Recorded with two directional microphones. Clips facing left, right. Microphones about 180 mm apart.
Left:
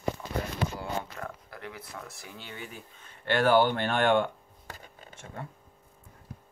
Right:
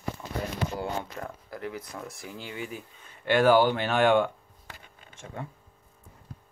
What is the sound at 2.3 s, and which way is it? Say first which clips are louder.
Speech: right 6 dB; 15° right (ahead or behind).